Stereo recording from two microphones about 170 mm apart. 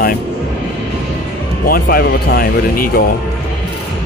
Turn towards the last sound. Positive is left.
turn(degrees=60)  # may be behind; listen again after turning